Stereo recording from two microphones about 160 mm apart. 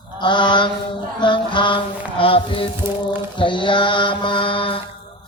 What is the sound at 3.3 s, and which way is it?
Mantra, 30° left (ahead or behind).